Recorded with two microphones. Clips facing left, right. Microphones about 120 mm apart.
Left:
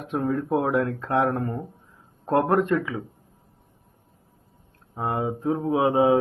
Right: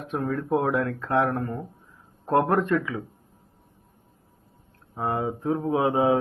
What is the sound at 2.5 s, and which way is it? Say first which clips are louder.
Speech: left 1 dB; 20° left (ahead or behind).